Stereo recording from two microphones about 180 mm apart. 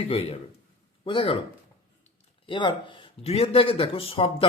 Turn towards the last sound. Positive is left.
turn(degrees=30)  # may be behind; listen again after turning